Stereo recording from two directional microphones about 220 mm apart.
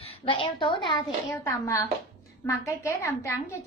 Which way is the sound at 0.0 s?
25° left (ahead or behind).